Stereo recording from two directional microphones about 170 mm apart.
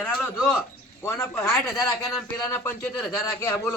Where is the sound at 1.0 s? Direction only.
15° left (ahead or behind).